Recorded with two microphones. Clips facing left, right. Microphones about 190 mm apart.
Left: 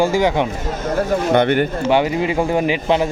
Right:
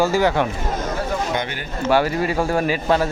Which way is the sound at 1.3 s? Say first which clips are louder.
Left 11 dB; 60° left (ahead or behind).